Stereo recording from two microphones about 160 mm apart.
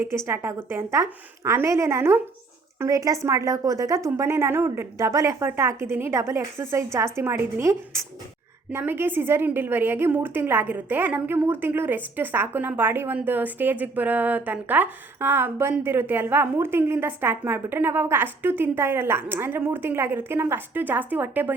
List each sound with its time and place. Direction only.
0.3 s a woman's voice: 15° right (ahead or behind)